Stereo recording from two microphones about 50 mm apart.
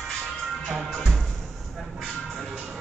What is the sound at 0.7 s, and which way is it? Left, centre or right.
Music, centre.